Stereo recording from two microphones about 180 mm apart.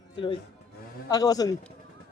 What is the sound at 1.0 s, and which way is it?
Speech, 20° left (ahead or behind).